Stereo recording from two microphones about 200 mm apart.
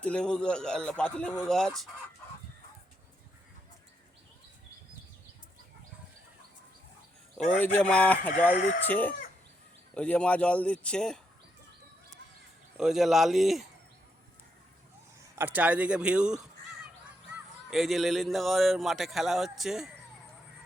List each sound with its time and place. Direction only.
0.0 s speech: 5° left (ahead or behind)
7.6 s speech: 5° left (ahead or behind)
8.5 s speech: 40° left (ahead or behind)
8.8 s speech: 10° left (ahead or behind)
12.7 s speech: centre (ahead or behind)
15.4 s speech: 10° right (ahead or behind)